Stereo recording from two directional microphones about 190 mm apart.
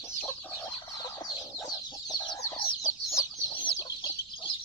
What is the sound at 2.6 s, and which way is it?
Chicken, 25° left (ahead or behind).